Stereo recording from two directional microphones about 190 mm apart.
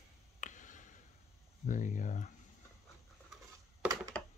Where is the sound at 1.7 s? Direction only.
40° left (ahead or behind).